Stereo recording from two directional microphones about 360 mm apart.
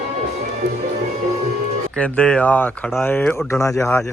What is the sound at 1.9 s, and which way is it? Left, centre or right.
Speech, centre.